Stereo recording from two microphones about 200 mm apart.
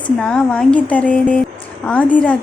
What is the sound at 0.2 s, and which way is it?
A woman's voice, 5° left (ahead or behind).